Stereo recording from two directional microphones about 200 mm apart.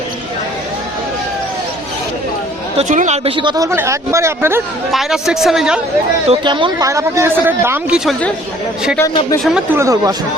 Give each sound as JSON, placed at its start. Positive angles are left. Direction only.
{"t": 2.7, "sound": "speech", "side_deg": -35}
{"t": 4.9, "sound": "speech", "side_deg": 0}
{"t": 6.2, "sound": "speech", "side_deg": -25}
{"t": 9.0, "sound": "speech", "side_deg": 15}
{"t": 9.4, "sound": "speech", "side_deg": 0}
{"t": 9.7, "sound": "speech", "side_deg": -15}